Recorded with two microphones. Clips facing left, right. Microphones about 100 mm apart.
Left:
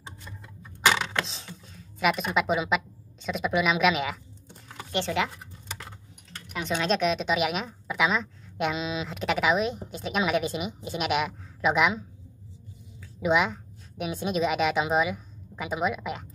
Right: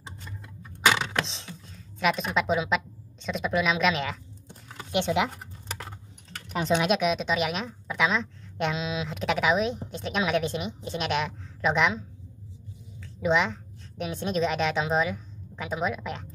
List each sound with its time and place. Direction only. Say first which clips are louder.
0.8 s a sound: even; centre (ahead or behind)
3.3 s a woman's voice: left 1 dB; 5° left (ahead or behind)
4.9 s speech: right 2 dB; 15° right (ahead or behind)
6.9 s a woman's voice: even; centre (ahead or behind)
13.0 s a woman's voice: even; 5° left (ahead or behind)